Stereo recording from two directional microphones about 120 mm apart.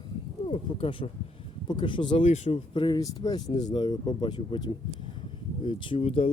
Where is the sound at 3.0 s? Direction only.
30° left (ahead or behind).